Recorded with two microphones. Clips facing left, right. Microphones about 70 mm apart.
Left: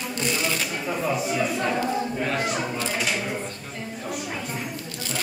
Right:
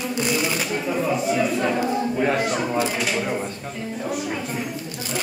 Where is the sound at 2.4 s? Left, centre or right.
Centre.